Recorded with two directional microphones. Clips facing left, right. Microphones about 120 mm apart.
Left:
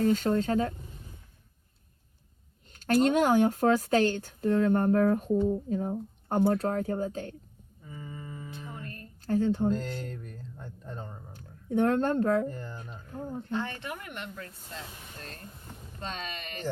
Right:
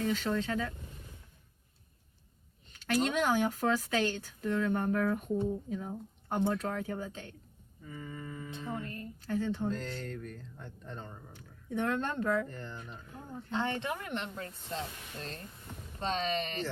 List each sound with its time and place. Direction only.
0.0 s speech: 45° left (ahead or behind)
2.7 s speech: 45° left (ahead or behind)
7.9 s speech: 10° left (ahead or behind)
8.7 s a sound: 20° right (ahead or behind)
9.2 s speech: 50° left (ahead or behind)
9.7 s speech: 5° left (ahead or behind)
11.3 s speech: 45° left (ahead or behind)
12.5 s speech: 5° left (ahead or behind)
12.7 s speech: 35° left (ahead or behind)
13.5 s speech: 25° right (ahead or behind)